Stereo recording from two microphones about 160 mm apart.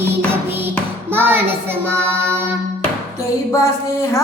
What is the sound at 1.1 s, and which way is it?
Music, 15° right (ahead or behind).